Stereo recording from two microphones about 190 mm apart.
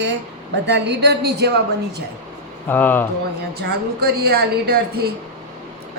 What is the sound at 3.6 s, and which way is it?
A woman's voice, 55° right (ahead or behind).